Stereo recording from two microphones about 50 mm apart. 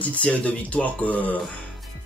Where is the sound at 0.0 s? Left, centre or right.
Left.